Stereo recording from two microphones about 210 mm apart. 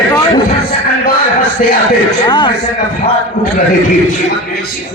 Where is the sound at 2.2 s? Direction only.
20° left (ahead or behind).